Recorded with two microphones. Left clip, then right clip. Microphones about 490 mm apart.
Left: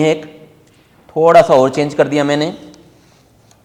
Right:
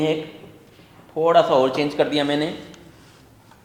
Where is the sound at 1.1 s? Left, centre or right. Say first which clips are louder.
Left 8 dB; left.